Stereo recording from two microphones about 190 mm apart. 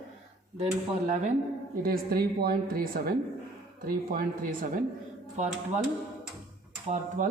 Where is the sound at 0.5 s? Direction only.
35° right (ahead or behind).